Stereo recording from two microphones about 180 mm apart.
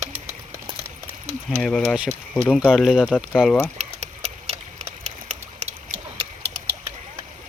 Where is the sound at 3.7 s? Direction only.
35° right (ahead or behind).